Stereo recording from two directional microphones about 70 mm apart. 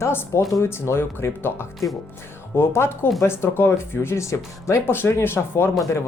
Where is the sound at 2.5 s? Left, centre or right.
Left.